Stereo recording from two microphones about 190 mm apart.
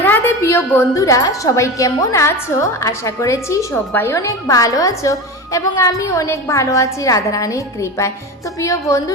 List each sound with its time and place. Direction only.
0.0 s a woman's voice: 10° left (ahead or behind)